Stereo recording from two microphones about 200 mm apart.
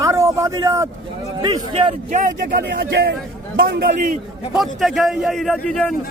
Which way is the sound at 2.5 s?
50° right (ahead or behind).